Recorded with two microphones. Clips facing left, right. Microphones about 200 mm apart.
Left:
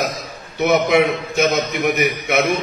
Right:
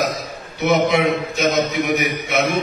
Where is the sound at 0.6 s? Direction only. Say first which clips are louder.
Left 2 dB; 55° left (ahead or behind).